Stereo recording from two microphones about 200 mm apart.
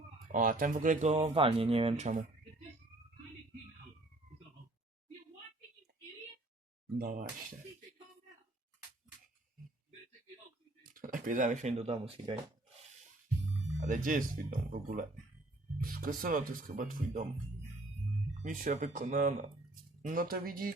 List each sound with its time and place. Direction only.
0.3 s speech: 45° right (ahead or behind)
7.0 s speech: 45° right (ahead or behind)
10.8 s speech: 45° right (ahead or behind); by 12.4 s 25° right (ahead or behind)
13.7 s speech: 40° right (ahead or behind)
18.4 s speech: 40° right (ahead or behind)